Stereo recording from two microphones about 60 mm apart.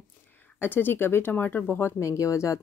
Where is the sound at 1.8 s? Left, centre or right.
Left.